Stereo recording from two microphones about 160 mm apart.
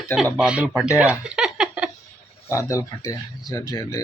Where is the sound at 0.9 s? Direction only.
5° right (ahead or behind).